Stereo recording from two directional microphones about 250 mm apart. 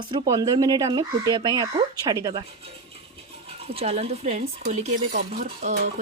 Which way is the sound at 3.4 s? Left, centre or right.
Right.